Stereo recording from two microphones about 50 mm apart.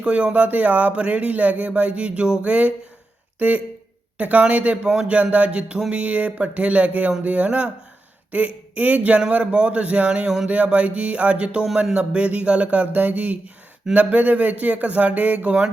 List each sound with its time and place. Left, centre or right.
0.0 s speech: right
10.5 s speech: right